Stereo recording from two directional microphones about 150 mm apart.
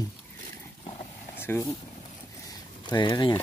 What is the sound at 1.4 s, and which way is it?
Speech, 15° left (ahead or behind).